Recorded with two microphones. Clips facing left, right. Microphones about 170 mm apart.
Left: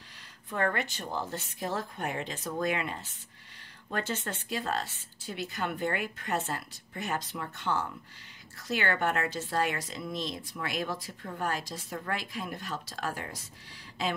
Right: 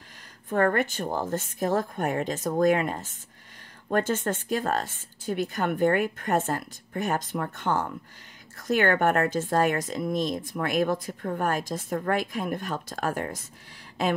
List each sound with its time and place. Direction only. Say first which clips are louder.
0.5 s speech: right 7 dB; 50° right (ahead or behind)